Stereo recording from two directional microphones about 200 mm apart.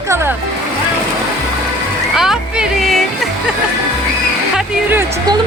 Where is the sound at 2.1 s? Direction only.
Centre (ahead or behind).